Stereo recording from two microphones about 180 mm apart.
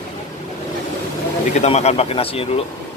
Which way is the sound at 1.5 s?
35° left (ahead or behind).